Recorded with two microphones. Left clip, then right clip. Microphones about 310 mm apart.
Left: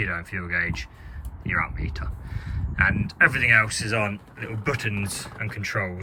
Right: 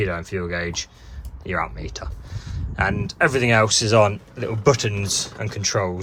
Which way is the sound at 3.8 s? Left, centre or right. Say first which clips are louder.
Right 9 dB; right.